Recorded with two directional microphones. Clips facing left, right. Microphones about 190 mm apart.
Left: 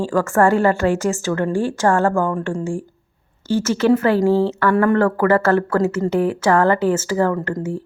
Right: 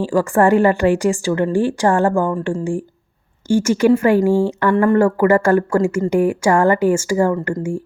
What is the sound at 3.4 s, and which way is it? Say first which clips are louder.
Speech: right 3 dB; 15° right (ahead or behind).